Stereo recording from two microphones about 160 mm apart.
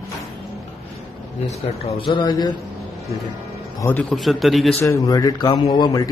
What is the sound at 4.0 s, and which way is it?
Speech, centre (ahead or behind).